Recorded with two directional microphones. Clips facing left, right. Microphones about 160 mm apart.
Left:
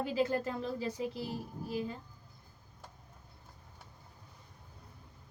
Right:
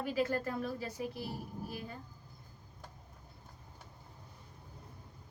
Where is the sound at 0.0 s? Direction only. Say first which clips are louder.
Left 2 dB; 25° left (ahead or behind).